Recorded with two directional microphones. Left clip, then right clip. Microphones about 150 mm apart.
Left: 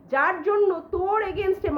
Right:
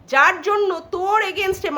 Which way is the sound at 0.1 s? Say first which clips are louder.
Right 6 dB; 20° right (ahead or behind).